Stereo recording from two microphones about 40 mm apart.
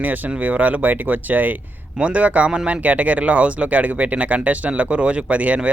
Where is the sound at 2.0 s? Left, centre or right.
Right.